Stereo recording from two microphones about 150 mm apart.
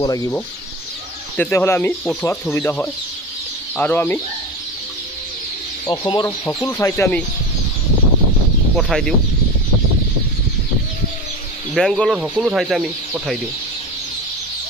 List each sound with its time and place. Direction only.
0.0 s speech: 25° left (ahead or behind)
1.3 s speech: 10° left (ahead or behind)
5.9 s speech: 30° left (ahead or behind)
6.2 s speech: 15° left (ahead or behind)
8.7 s speech: centre (ahead or behind)
11.7 s speech: 5° left (ahead or behind)